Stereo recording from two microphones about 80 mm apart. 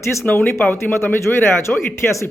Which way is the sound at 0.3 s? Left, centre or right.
Left.